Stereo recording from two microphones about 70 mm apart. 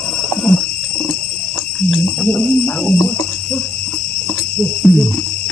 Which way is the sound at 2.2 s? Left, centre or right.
Centre.